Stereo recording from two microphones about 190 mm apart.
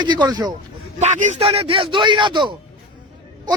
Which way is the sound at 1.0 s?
40° right (ahead or behind).